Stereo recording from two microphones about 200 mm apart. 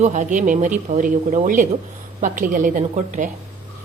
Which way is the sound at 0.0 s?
40° right (ahead or behind).